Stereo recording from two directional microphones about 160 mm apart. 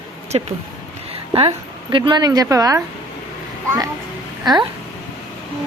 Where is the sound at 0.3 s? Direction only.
40° right (ahead or behind); by 2.8 s 20° right (ahead or behind).